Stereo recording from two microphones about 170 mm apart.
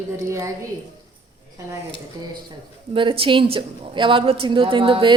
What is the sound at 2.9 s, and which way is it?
A woman's voice, 30° right (ahead or behind).